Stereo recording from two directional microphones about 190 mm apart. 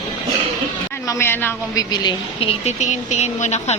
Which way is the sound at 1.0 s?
10° left (ahead or behind).